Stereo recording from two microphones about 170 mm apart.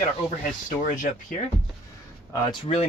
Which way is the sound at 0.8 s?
50° left (ahead or behind).